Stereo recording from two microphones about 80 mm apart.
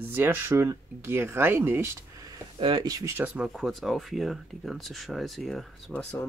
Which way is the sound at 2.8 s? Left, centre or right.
Right.